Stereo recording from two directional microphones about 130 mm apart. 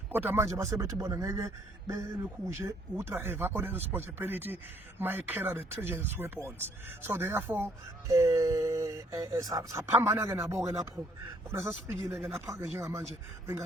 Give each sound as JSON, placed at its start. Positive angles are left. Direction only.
{"t": 0.1, "sound": "speech", "side_deg": -15}